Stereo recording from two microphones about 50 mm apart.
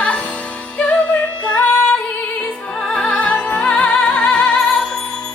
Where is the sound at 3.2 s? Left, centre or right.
Left.